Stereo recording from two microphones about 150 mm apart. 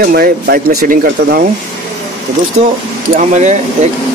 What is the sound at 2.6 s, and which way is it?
Speech, 45° right (ahead or behind).